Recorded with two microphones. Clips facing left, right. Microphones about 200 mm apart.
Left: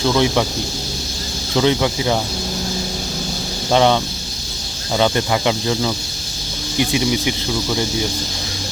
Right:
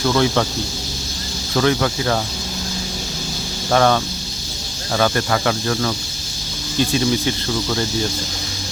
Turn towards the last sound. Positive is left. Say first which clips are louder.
# left 1 dB
turn(degrees=15)  # may be behind; listen again after turning